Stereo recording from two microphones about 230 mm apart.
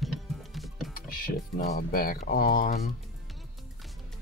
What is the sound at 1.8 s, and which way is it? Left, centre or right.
Speech, left.